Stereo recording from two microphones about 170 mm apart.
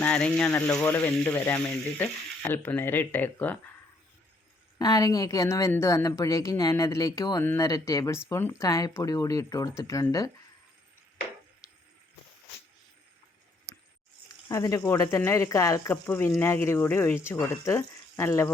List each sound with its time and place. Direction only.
0.0 s speech: 5° left (ahead or behind)
0.7 s frying: 5° left (ahead or behind)
4.8 s a woman's voice: 20° left (ahead or behind)
14.4 s frying: 20° left (ahead or behind)